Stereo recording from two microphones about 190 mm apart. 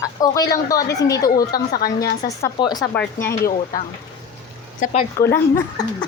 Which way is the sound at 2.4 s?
20° left (ahead or behind).